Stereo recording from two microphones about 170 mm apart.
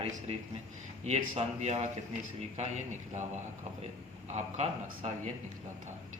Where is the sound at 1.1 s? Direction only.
40° right (ahead or behind).